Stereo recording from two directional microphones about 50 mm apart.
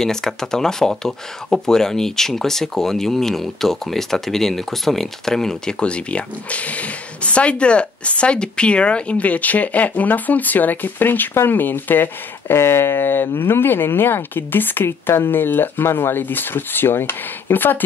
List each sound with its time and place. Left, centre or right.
0.0 s speech: centre
5.8 s speech: left